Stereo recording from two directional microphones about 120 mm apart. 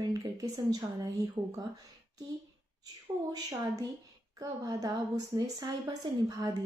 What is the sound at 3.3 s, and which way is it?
A woman's voice, 30° right (ahead or behind).